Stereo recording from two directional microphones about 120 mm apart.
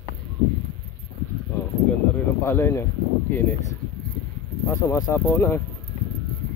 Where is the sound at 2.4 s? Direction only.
20° left (ahead or behind).